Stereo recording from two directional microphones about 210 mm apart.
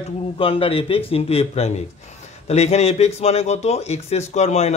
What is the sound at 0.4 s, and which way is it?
Speech, 25° left (ahead or behind).